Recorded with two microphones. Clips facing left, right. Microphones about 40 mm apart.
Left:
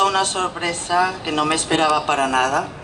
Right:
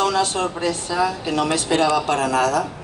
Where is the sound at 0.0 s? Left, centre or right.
Left.